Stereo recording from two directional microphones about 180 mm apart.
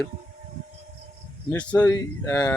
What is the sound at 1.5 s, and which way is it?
Speech, 10° left (ahead or behind).